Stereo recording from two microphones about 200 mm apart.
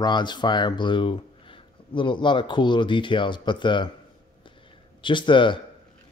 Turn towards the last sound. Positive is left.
turn(degrees=25)  # may be behind; listen again after turning